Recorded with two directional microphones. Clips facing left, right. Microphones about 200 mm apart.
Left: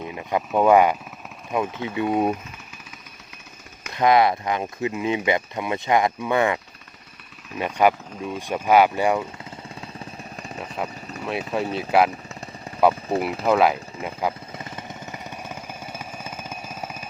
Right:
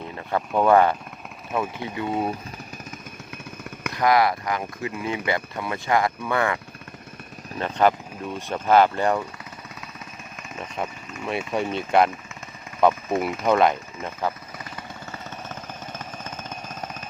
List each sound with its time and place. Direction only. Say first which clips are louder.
0.1 s speech: left 1 dB; 15° left (ahead or behind)
3.9 s speech: left 2 dB; 20° left (ahead or behind)
7.6 s speech: left 1 dB; 10° left (ahead or behind)
11.3 s speech: even; centre (ahead or behind)
12.9 s a sound: left 1 dB; 35° left (ahead or behind)
13.4 s speech: left 1 dB; 5° left (ahead or behind)
14.6 s jackhammer: left 1 dB; 20° left (ahead or behind)